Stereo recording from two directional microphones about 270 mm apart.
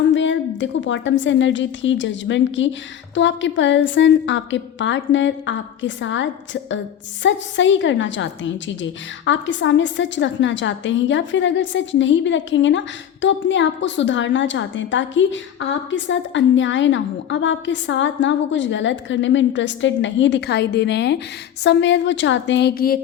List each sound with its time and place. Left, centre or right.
0.1 s a woman's voice: left